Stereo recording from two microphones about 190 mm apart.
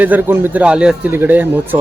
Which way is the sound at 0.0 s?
10° right (ahead or behind).